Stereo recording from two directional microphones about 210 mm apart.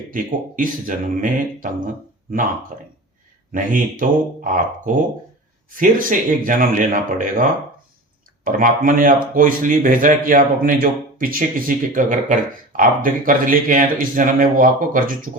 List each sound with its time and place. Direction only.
0.1 s a man's voice: 40° right (ahead or behind)
2.7 s a man's voice: 35° right (ahead or behind)
5.7 s a man's voice: 40° right (ahead or behind)
8.4 s a man's voice: 40° right (ahead or behind)